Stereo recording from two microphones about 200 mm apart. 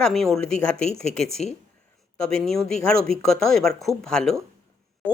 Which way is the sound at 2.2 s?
Centre (ahead or behind).